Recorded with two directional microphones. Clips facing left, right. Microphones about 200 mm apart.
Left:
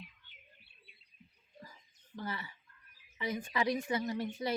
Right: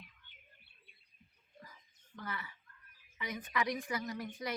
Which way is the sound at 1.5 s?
30° left (ahead or behind).